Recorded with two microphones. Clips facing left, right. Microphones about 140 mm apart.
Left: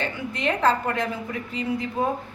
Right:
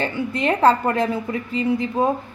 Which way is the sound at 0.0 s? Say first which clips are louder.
Right 5 dB; 35° right (ahead or behind).